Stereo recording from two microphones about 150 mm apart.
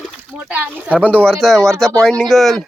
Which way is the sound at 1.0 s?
10° left (ahead or behind).